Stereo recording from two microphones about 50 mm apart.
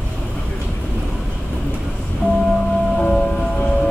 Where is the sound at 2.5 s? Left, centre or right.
Centre.